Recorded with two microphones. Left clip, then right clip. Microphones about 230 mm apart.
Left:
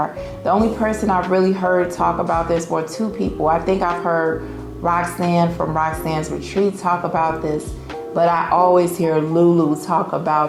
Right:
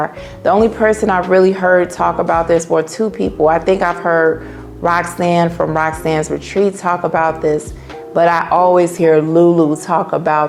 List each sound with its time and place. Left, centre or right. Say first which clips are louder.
0.0 s speech: right 5 dB; right